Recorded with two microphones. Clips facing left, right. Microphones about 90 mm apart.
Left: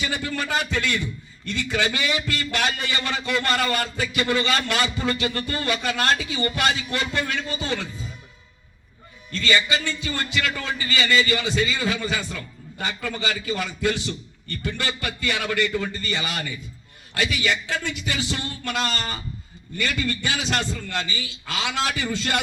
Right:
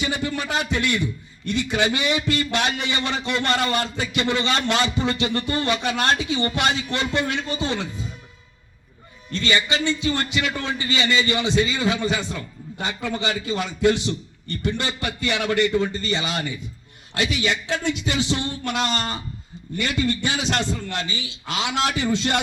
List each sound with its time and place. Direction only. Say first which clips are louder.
0.0 s a man's voice: right 2 dB; 20° right (ahead or behind)
9.3 s a man's voice: even; 25° right (ahead or behind)